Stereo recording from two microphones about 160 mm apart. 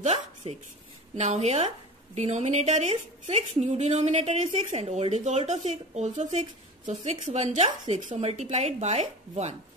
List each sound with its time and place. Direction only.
1.1 s a woman's voice: 45° right (ahead or behind)